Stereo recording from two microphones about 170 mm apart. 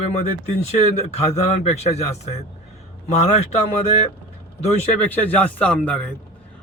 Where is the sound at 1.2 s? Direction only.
40° left (ahead or behind).